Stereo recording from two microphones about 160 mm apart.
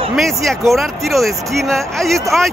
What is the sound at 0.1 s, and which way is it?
Speech, centre (ahead or behind).